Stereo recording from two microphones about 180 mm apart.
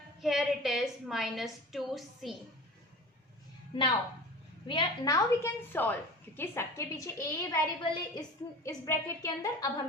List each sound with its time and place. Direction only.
0.2 s a woman's voice: centre (ahead or behind)
3.7 s a woman's voice: 30° left (ahead or behind)